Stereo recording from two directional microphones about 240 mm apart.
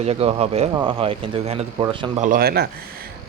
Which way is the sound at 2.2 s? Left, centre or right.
Right.